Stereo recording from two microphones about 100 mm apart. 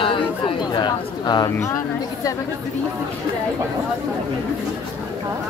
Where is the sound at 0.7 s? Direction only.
45° left (ahead or behind).